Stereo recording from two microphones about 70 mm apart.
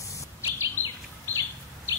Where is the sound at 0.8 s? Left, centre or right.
Left.